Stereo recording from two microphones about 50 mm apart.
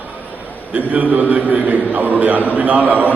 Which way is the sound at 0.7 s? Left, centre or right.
Right.